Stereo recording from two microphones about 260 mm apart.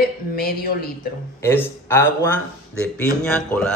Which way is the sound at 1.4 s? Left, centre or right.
Centre.